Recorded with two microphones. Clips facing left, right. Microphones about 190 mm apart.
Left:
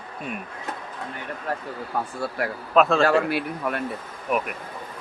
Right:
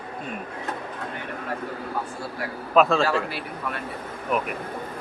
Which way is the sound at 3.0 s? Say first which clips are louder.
Left 5 dB; 55° left (ahead or behind).